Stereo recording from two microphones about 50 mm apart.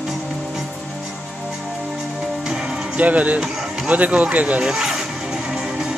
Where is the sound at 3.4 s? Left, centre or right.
Centre.